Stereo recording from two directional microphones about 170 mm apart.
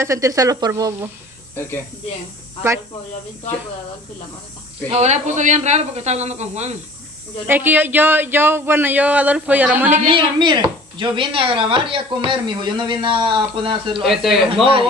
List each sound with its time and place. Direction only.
0.0 s speech: 20° right (ahead or behind)
1.5 s speech: 15° left (ahead or behind)
4.8 s speech: 40° right (ahead or behind)
7.4 s speech: 10° right (ahead or behind)
10.0 s speech: 30° right (ahead or behind)
14.0 s a man's voice: centre (ahead or behind)